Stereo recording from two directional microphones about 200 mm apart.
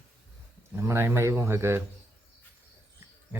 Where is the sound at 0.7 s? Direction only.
10° right (ahead or behind).